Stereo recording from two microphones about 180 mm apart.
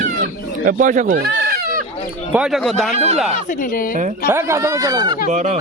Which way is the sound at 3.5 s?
50° left (ahead or behind).